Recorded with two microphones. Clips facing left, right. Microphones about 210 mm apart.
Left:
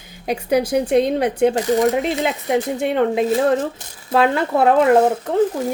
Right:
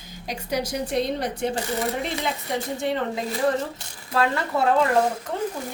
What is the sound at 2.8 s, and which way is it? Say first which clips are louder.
Speech: left 8 dB; 60° left (ahead or behind).